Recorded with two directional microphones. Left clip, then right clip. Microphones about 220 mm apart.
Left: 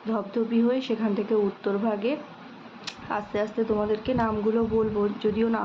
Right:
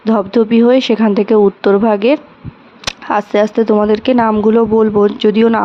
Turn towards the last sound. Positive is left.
turn(degrees=-50)  # may be behind; listen again after turning